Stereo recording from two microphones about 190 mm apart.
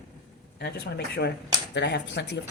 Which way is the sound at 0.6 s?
60° left (ahead or behind).